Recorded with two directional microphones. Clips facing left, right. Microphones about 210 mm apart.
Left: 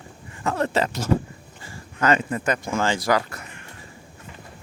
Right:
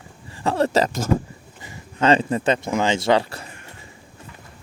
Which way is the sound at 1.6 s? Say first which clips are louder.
Right 3 dB; 20° right (ahead or behind).